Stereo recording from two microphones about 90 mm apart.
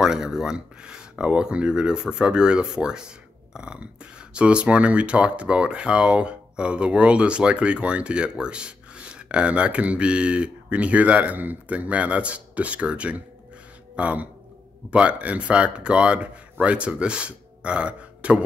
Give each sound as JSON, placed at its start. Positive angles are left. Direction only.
{"t": 0.0, "sound": "speech", "side_deg": -5}